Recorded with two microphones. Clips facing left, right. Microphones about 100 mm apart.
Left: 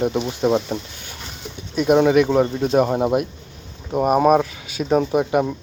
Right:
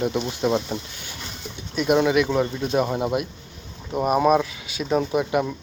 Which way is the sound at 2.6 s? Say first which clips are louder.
Left 5 dB; 50° left (ahead or behind).